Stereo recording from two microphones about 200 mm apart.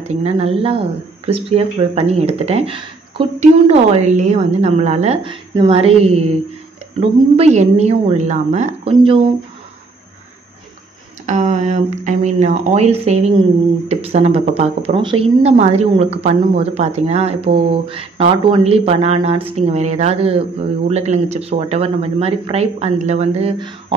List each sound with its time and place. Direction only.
0.0 s speech: 30° right (ahead or behind)
11.2 s speech: 35° right (ahead or behind)